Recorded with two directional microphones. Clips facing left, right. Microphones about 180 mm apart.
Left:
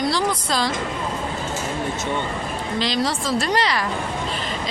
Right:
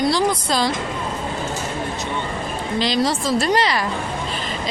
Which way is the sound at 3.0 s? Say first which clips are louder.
Right 3 dB; 25° right (ahead or behind).